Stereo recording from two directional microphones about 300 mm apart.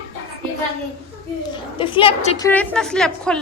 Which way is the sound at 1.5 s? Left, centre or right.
Centre.